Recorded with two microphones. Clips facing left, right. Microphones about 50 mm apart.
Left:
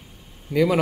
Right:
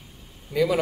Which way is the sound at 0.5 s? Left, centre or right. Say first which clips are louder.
Left 3 dB; left.